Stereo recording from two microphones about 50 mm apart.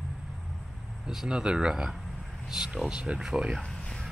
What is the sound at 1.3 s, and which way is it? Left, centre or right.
Speech, centre.